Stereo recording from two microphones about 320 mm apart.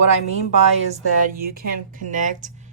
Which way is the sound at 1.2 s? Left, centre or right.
Right.